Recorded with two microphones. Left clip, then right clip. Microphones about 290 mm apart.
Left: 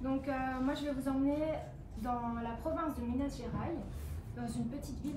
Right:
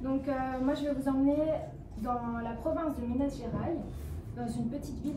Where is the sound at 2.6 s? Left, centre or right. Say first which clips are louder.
Right 5 dB; centre.